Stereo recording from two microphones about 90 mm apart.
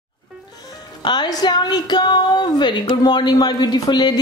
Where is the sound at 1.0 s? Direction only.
55° left (ahead or behind).